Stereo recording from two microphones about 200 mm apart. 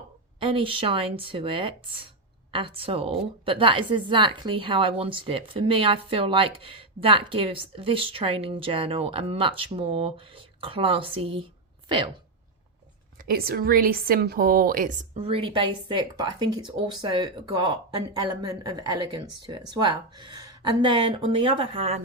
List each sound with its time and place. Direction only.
0.3 s a woman's voice: 25° right (ahead or behind)
13.2 s a woman's voice: 50° right (ahead or behind); by 22.0 s 30° right (ahead or behind)